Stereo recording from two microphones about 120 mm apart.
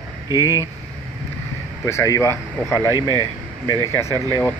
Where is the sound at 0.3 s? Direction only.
25° right (ahead or behind).